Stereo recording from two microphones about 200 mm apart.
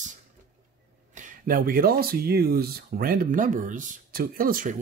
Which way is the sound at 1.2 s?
45° right (ahead or behind).